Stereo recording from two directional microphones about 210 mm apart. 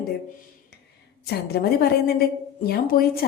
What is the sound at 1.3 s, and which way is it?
A woman's voice, 50° left (ahead or behind).